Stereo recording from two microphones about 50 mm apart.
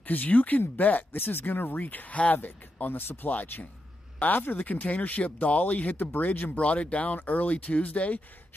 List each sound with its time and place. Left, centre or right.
0.0 s speech: left
3.3 s speech: left